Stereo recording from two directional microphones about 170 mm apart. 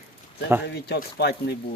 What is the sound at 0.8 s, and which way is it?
Speech, 75° left (ahead or behind).